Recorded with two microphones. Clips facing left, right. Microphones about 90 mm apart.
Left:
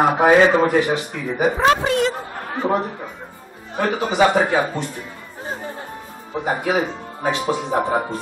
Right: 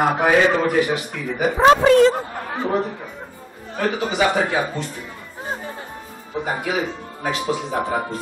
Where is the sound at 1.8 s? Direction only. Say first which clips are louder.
Right 7 dB; 40° right (ahead or behind).